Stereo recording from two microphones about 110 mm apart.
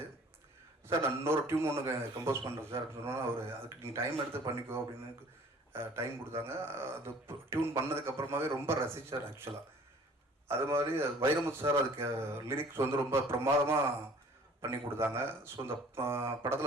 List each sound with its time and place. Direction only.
0.9 s a man's voice: 20° right (ahead or behind)
6.4 s a man's voice: 20° right (ahead or behind)
10.5 s a man's voice: 25° right (ahead or behind)